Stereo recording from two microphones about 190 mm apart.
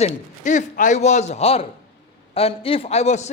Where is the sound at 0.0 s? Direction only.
40° left (ahead or behind).